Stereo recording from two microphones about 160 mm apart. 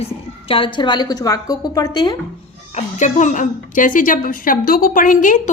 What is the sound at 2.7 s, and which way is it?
A woman's voice, 50° left (ahead or behind).